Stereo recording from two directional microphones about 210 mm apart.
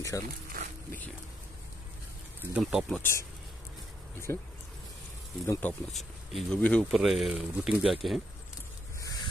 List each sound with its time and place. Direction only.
0.1 s speech: 15° left (ahead or behind)
2.5 s speech: 5° right (ahead or behind)
3.0 s speech: 10° left (ahead or behind)
4.3 s speech: 10° left (ahead or behind)
5.5 s speech: 10° left (ahead or behind)
9.0 s a sound: 20° left (ahead or behind)